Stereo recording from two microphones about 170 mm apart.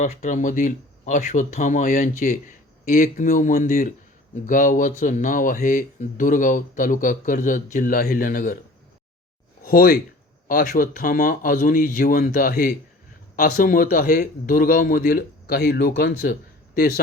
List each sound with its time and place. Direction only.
0.0 s speech: 45° left (ahead or behind)
9.6 s a man's voice: 60° left (ahead or behind)